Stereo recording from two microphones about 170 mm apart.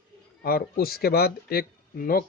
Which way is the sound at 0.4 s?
65° left (ahead or behind).